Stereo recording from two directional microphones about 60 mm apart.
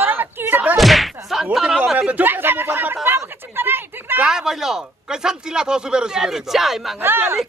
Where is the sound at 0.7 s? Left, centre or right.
Centre.